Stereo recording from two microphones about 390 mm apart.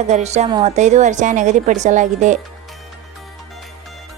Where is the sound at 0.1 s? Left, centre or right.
Centre.